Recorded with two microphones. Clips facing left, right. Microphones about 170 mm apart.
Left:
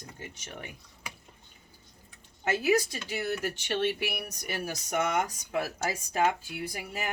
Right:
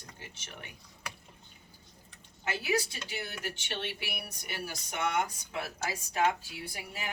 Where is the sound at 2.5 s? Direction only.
45° left (ahead or behind).